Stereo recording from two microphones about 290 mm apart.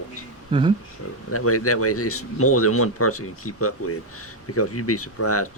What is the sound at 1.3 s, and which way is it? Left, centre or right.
Speech, left.